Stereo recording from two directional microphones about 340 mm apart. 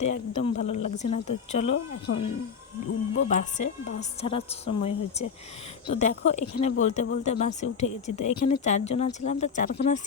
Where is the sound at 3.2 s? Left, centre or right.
Left.